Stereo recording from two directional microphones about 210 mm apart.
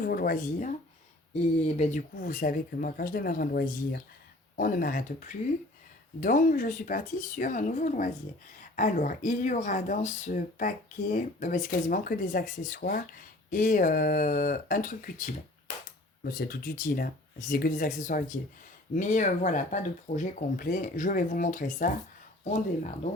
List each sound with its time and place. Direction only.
0.0 s speech: 45° left (ahead or behind)
6.1 s speech: 40° left (ahead or behind)